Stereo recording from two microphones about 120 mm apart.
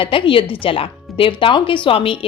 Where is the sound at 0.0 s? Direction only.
45° left (ahead or behind).